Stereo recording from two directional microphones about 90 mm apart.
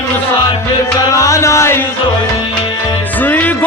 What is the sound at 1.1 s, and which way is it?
Music, 35° left (ahead or behind).